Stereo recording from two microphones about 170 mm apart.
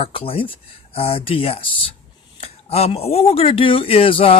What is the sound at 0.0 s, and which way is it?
Speech, 35° left (ahead or behind).